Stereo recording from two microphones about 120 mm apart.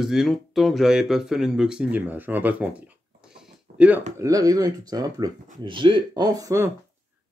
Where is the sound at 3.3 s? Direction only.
10° right (ahead or behind).